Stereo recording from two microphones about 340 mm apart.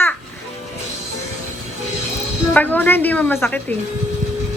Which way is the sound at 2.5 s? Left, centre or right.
Centre.